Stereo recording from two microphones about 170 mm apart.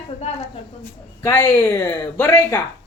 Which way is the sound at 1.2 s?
20° left (ahead or behind).